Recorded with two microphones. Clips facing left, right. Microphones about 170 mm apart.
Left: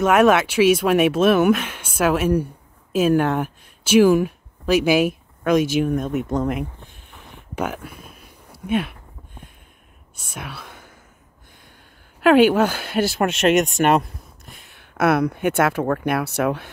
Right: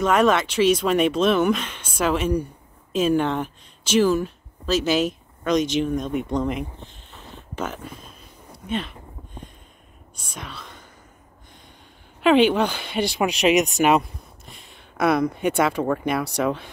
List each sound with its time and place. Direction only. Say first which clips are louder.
0.0 s speech: left 3 dB; 5° left (ahead or behind)
12.2 s speech: left 3 dB; 5° left (ahead or behind)